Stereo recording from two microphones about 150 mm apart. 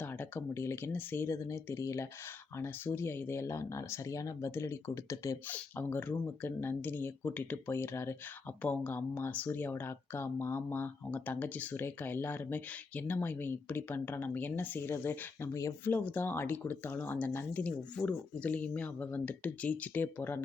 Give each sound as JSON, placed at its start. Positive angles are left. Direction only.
{"t": 0.0, "sound": "speech", "side_deg": 15}